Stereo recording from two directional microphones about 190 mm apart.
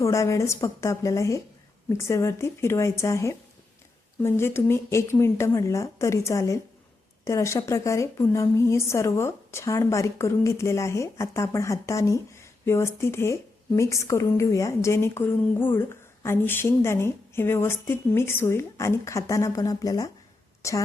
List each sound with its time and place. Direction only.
0.0 s a woman's voice: 15° left (ahead or behind)